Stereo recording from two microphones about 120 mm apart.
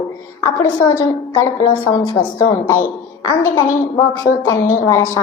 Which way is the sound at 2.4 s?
25° left (ahead or behind).